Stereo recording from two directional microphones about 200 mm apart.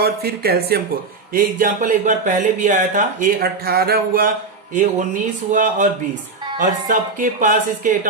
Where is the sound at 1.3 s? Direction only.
40° right (ahead or behind).